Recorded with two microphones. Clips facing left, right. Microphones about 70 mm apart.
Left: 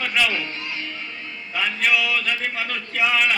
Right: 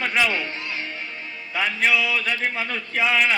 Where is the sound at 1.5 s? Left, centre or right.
Right.